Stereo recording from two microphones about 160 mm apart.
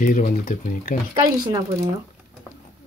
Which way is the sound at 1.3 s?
25° right (ahead or behind).